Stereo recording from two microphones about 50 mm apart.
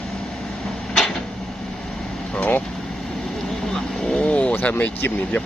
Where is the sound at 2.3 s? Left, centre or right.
Left.